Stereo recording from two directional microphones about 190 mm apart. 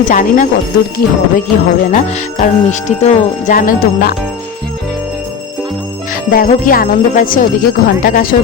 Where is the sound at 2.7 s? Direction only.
35° left (ahead or behind).